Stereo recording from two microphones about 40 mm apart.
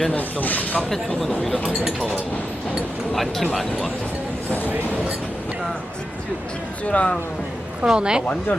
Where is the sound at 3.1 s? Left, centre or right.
Centre.